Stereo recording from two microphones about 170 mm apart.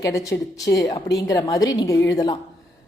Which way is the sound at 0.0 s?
20° left (ahead or behind).